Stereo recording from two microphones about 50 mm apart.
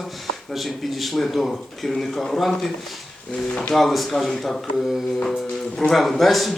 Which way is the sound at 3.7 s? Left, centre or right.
Centre.